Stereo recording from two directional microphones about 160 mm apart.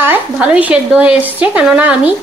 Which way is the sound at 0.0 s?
10° right (ahead or behind).